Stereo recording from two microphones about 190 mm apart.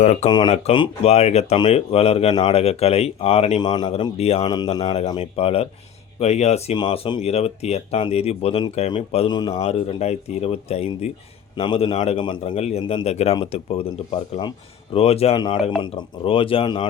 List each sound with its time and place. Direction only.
0.0 s speech: 35° left (ahead or behind)
0.3 s speech: 20° left (ahead or behind)
4.4 s speech: 20° left (ahead or behind)
9.6 s speech: 35° left (ahead or behind)